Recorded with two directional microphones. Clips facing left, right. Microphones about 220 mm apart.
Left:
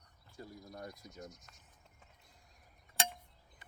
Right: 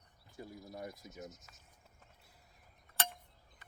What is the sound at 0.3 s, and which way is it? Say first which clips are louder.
Speech: right 1 dB; 20° right (ahead or behind).